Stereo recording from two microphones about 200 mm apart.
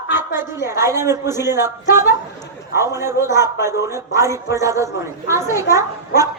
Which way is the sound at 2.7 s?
15° right (ahead or behind).